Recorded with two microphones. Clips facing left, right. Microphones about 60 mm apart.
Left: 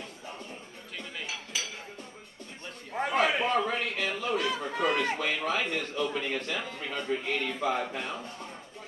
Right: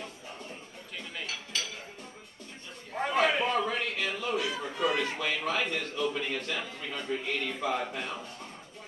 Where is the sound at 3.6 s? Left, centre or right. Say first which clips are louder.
Left 1 dB; left.